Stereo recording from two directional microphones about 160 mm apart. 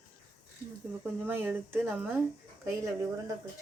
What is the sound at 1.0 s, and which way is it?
Speech, 10° right (ahead or behind).